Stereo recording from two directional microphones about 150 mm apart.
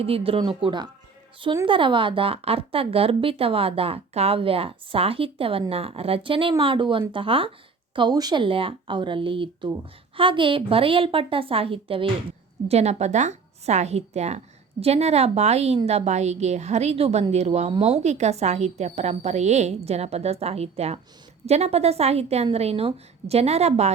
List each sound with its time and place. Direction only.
0.0 s a woman's voice: 40° right (ahead or behind)